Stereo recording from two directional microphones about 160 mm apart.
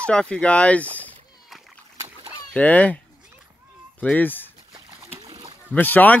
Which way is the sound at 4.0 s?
10° left (ahead or behind).